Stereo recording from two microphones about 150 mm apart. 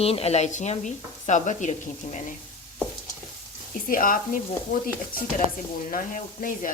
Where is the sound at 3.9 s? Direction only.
65° left (ahead or behind).